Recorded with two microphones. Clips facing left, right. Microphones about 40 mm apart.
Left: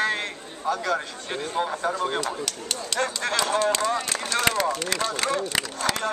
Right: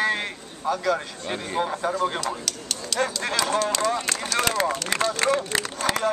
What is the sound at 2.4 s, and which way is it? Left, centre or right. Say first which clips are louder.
Speech: left 1 dB; centre.